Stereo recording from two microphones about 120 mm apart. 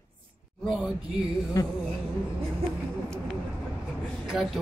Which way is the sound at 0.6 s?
Centre (ahead or behind).